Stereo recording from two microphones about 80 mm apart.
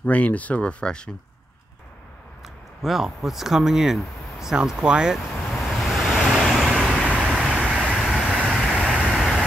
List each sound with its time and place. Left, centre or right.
0.0 s speech: centre
2.4 s speech: centre
5.5 s vehicle: centre
8.0 s vehicle: centre
8.5 s vehicle: centre
9.1 s vehicle: centre